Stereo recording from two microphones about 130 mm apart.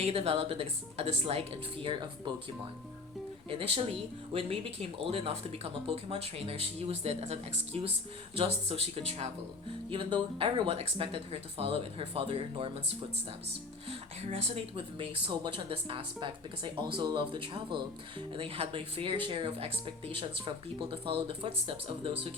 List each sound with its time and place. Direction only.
0.0 s speech: 50° right (ahead or behind)
3.5 s speech: 45° right (ahead or behind)
14.3 s speech: 50° right (ahead or behind)